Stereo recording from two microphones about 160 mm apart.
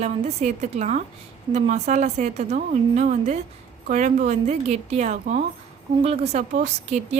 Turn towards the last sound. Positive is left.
turn(degrees=-45)  # may be behind; listen again after turning